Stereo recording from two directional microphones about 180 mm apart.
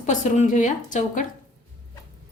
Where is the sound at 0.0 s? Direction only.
40° left (ahead or behind).